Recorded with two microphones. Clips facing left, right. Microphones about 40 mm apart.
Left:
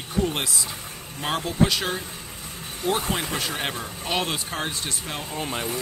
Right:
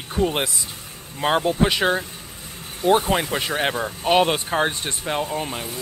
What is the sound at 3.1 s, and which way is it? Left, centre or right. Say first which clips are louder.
Speech: right 5 dB; right.